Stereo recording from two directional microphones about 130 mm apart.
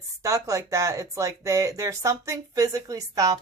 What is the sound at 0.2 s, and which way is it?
Speech, 25° right (ahead or behind).